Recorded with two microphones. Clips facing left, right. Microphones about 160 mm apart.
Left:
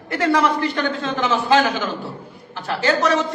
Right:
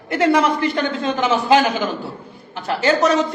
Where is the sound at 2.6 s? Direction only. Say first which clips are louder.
Right 3 dB; 20° right (ahead or behind).